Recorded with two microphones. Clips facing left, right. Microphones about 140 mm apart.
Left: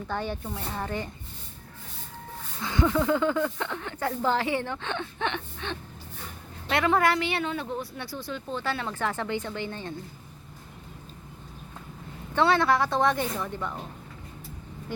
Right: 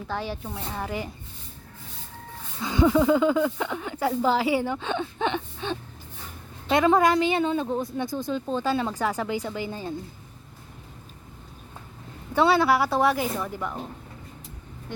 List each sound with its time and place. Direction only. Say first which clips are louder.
0.1 s speech: even; centre (ahead or behind)
2.6 s speech: right 5 dB; 15° right (ahead or behind)
12.3 s speech: right 2 dB; 10° right (ahead or behind)